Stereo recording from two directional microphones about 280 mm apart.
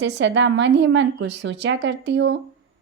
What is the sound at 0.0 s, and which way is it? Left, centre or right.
A woman's voice, right.